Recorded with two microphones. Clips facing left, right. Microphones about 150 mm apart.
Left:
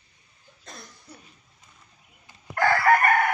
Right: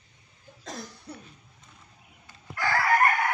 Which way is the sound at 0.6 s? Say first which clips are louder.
Right 7 dB; 90° right.